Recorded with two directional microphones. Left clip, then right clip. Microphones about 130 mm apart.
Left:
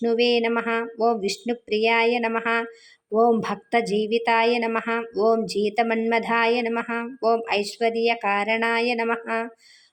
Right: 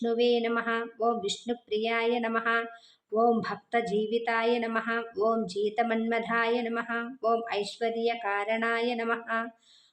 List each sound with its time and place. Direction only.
0.0 s speech: 20° left (ahead or behind)
3.9 s a woman's voice: 40° right (ahead or behind)
4.2 s speech: 20° left (ahead or behind)